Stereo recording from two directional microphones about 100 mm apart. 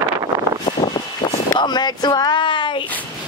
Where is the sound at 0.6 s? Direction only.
55° left (ahead or behind).